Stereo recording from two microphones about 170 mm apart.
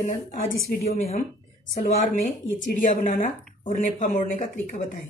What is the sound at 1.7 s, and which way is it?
Speech, 45° left (ahead or behind).